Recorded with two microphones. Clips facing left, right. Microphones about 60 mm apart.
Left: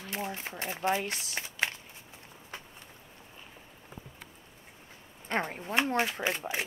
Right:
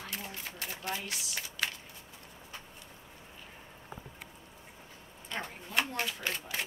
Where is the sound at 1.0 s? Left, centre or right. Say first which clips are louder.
Left 3 dB; left.